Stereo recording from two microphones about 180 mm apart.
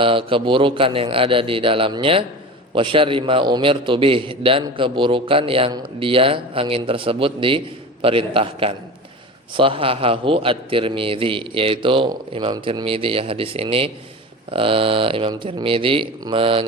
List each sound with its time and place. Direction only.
0.0 s a man's voice: 30° right (ahead or behind)